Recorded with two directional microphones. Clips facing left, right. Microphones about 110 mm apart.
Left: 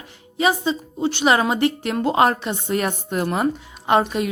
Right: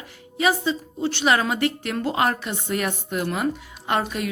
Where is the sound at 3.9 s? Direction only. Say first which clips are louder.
Left 6 dB; 25° left (ahead or behind).